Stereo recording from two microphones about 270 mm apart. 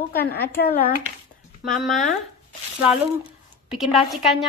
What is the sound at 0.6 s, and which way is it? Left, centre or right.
Speech, left.